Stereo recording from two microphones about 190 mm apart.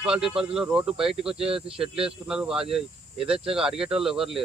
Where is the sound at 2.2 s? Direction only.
5° right (ahead or behind).